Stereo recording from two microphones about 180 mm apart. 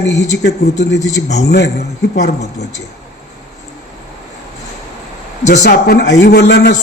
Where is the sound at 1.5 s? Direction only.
65° left (ahead or behind).